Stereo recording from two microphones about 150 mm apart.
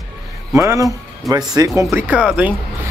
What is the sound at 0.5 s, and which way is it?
Speech, 20° right (ahead or behind).